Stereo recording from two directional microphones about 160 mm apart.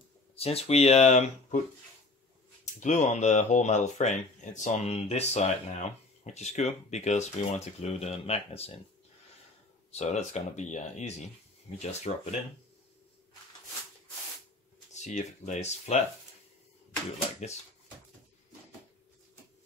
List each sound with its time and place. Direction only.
0.4 s speech: 40° left (ahead or behind)
2.8 s speech: 45° left (ahead or behind)
9.8 s speech: 45° left (ahead or behind)
14.9 s speech: 45° left (ahead or behind)